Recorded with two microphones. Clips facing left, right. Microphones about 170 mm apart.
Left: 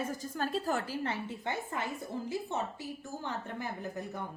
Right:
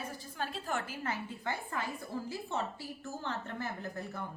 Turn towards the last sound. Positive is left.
turn(degrees=15)  # may be behind; listen again after turning